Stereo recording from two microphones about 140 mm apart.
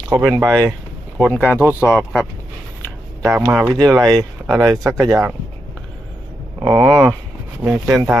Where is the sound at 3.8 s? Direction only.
25° right (ahead or behind).